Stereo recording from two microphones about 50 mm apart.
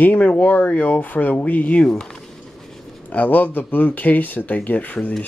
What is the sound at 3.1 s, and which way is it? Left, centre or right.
Speech, left.